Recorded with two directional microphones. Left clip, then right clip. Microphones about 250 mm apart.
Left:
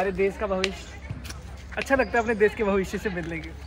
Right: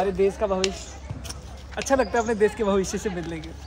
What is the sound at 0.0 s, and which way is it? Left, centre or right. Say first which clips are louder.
Speech: right 3 dB; centre.